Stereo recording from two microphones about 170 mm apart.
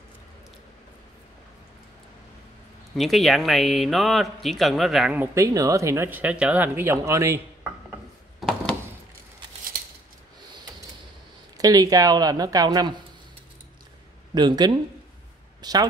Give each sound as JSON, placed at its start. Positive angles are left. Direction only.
{"t": 3.0, "sound": "a man's voice", "side_deg": 0}
{"t": 7.9, "sound": "mechanisms", "side_deg": 0}
{"t": 11.5, "sound": "speech", "side_deg": -20}
{"t": 14.3, "sound": "speech", "side_deg": -25}